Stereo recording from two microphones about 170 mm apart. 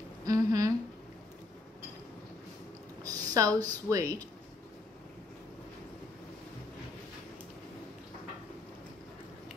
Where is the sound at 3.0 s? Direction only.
20° right (ahead or behind).